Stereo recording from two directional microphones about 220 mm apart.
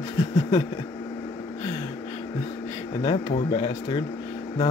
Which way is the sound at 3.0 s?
25° left (ahead or behind).